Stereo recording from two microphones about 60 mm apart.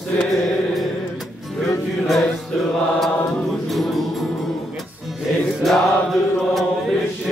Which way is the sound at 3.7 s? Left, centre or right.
Centre.